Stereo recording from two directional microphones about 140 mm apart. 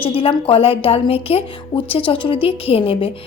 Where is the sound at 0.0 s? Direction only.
40° left (ahead or behind).